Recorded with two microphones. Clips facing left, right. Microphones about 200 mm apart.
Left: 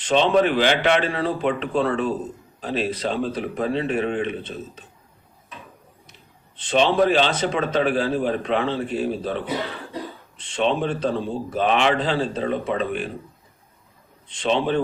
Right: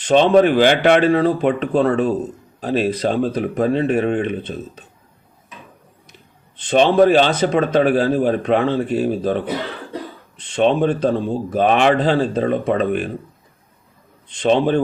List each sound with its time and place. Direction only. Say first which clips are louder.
0.0 s speech: right 6 dB; 45° right (ahead or behind)
6.7 s speech: right 6 dB; 45° right (ahead or behind)
14.4 s speech: right 6 dB; 45° right (ahead or behind)